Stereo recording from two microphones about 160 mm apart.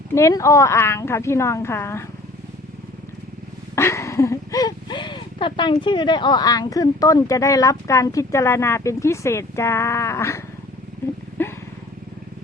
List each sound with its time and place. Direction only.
0.1 s a woman's voice: 20° left (ahead or behind)
3.8 s speech: 20° left (ahead or behind)
11.4 s vehicle: 15° left (ahead or behind)